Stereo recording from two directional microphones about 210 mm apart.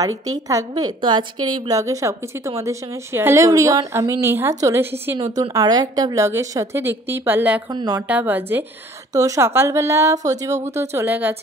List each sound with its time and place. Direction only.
0.0 s a woman's voice: 15° right (ahead or behind)
7.7 s speech: 20° right (ahead or behind)
8.1 s a woman's voice: 10° right (ahead or behind)